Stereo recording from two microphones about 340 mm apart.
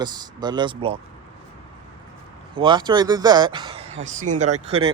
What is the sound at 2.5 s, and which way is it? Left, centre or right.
Speech, centre.